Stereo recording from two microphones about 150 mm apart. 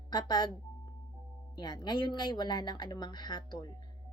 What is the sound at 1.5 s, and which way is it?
Speech, 30° left (ahead or behind).